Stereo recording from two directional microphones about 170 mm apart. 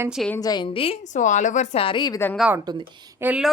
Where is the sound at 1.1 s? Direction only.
45° left (ahead or behind); by 2.2 s 25° left (ahead or behind).